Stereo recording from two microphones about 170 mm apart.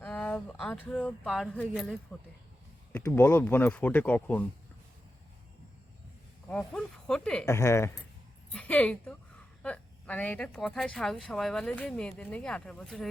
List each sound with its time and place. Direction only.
0.0 s speech: 10° left (ahead or behind)
3.0 s speech: 15° left (ahead or behind)
6.5 s speech: 5° left (ahead or behind)
7.4 s speech: 15° left (ahead or behind)